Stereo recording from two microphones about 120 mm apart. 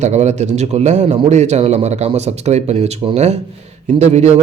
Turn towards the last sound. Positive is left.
turn(degrees=-70)  # may be behind; listen again after turning